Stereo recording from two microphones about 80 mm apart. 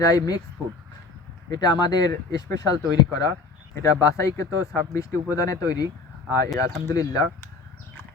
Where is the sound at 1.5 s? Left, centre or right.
Left.